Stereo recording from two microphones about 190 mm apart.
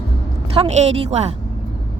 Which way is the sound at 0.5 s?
35° right (ahead or behind).